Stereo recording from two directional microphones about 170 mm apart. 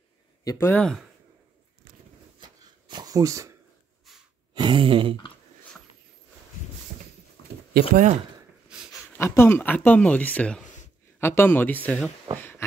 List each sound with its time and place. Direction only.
0.4 s speech: 20° left (ahead or behind)
2.4 s shuffling cards: 25° right (ahead or behind)
4.6 s a sound: 30° right (ahead or behind)
7.9 s speech: 45° right (ahead or behind)
9.1 s speech: 15° left (ahead or behind)
12.4 s a sound: 15° left (ahead or behind)